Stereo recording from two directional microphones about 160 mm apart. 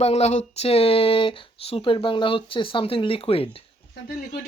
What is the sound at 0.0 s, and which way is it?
Speech, 40° left (ahead or behind).